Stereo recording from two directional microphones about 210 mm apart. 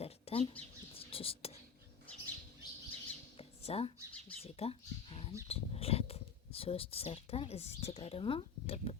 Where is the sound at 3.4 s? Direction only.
30° left (ahead or behind).